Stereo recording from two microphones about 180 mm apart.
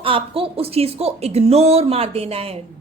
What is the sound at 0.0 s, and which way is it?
A woman's voice, 30° right (ahead or behind).